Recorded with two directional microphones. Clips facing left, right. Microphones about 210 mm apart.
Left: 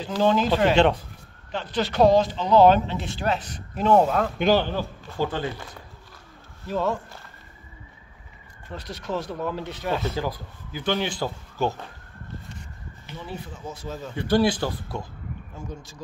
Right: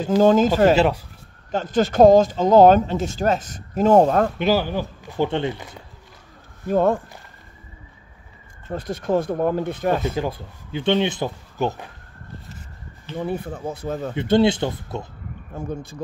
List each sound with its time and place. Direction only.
0.0 s speech: 45° right (ahead or behind)
0.7 s speech: 5° right (ahead or behind)
1.5 s speech: 45° right (ahead or behind)
4.4 s speech: 5° right (ahead or behind); by 5.7 s 20° right (ahead or behind)
6.7 s speech: 55° right (ahead or behind)
8.6 s speech: 50° right (ahead or behind)
10.0 s speech: 25° right (ahead or behind)
13.1 s speech: 55° right (ahead or behind)
14.1 s speech: 25° right (ahead or behind)
15.5 s speech: 55° right (ahead or behind)